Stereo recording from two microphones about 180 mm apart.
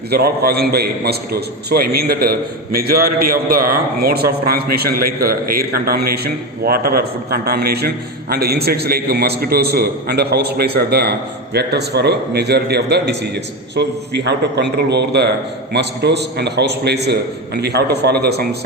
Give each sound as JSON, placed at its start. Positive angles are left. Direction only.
{"t": 0.1, "sound": "a man's voice", "side_deg": -60}